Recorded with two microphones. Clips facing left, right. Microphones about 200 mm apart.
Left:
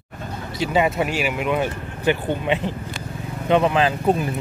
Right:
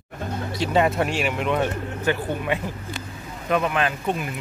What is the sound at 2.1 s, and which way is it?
Speech, 20° left (ahead or behind).